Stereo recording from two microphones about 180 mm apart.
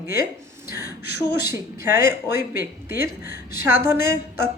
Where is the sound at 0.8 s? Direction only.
65° left (ahead or behind).